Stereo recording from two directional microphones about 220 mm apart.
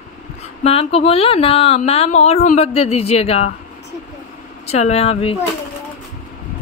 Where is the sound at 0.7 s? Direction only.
25° left (ahead or behind).